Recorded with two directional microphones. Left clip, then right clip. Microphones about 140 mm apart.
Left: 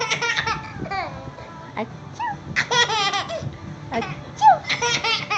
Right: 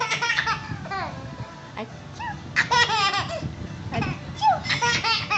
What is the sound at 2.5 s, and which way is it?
Laughter, 15° left (ahead or behind).